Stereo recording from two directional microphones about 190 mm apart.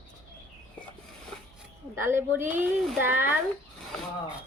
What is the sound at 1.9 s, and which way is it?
A woman's voice, 15° right (ahead or behind).